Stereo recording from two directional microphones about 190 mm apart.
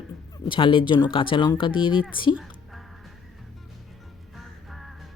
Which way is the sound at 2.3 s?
Centre (ahead or behind).